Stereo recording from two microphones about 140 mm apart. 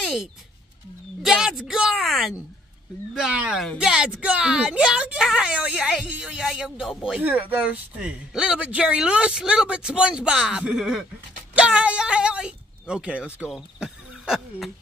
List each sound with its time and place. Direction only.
1.2 s speech: centre (ahead or behind)